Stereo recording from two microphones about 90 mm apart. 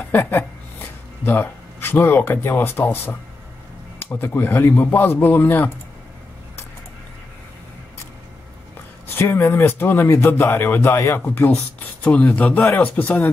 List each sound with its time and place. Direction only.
0.1 s speech: 25° left (ahead or behind)
9.1 s speech: 30° left (ahead or behind)